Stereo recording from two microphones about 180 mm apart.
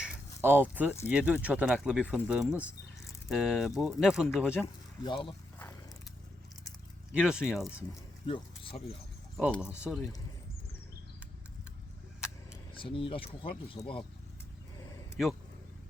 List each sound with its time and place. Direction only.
0.0 s a sound: 10° right (ahead or behind)
1.0 s speech: 5° right (ahead or behind)
4.6 s speech: 30° left (ahead or behind)
7.1 s speech: 5° right (ahead or behind)
8.3 s speech: 30° left (ahead or behind)
9.6 s speech: 5° right (ahead or behind)
12.7 s speech: 30° left (ahead or behind)